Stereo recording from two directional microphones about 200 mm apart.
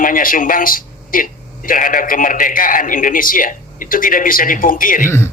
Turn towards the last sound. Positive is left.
turn(degrees=45)  # may be behind; listen again after turning